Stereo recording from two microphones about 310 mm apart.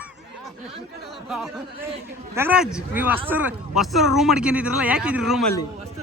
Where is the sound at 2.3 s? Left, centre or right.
Centre.